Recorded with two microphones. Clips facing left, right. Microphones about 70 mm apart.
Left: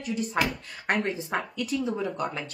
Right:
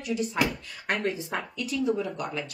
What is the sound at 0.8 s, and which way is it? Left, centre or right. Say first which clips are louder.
Speech: left 1 dB; left.